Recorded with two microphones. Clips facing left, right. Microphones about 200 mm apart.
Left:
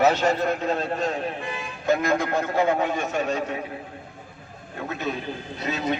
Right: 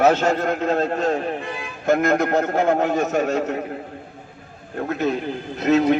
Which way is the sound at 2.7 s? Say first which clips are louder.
Right 5 dB; 45° right (ahead or behind).